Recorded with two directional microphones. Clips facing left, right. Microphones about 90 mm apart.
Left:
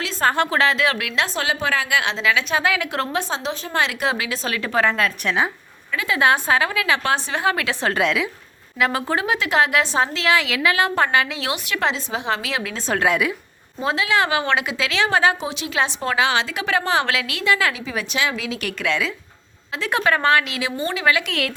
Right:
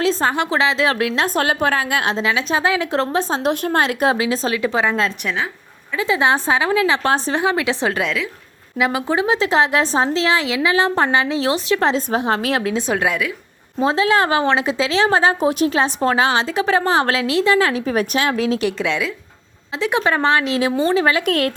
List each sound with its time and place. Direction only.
0.2 s a woman's voice: 20° right (ahead or behind)
0.9 s a woman's voice: 35° right (ahead or behind)
2.2 s a woman's voice: 30° right (ahead or behind)
3.4 s speech: 55° right (ahead or behind); by 4.2 s 40° right (ahead or behind)
4.2 s a woman's voice: 30° right (ahead or behind)
4.5 s a woman's voice: 15° right (ahead or behind); by 7.4 s 35° right (ahead or behind)
7.4 s a woman's voice: 20° right (ahead or behind)
9.2 s a woman's voice: 30° right (ahead or behind); by 12.6 s 45° right (ahead or behind)
12.7 s a woman's voice: 5° right (ahead or behind)
13.8 s a woman's voice: 35° right (ahead or behind)
18.6 s a woman's voice: 25° right (ahead or behind); by 21.5 s 40° right (ahead or behind)